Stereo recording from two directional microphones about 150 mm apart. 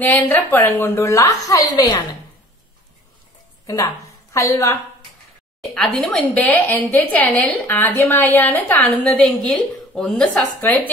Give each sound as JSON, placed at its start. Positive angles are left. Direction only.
{"t": 0.0, "sound": "a woman's voice", "side_deg": 10}
{"t": 3.6, "sound": "a woman's voice", "side_deg": 20}
{"t": 5.9, "sound": "a woman's voice", "side_deg": 5}